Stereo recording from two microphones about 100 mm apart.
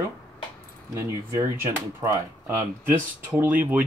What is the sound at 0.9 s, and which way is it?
Speech, 25° right (ahead or behind).